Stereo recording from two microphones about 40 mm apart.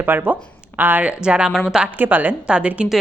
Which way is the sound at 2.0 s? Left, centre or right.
Right.